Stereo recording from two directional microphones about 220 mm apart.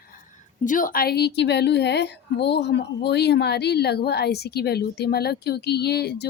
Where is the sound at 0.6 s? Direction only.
35° left (ahead or behind).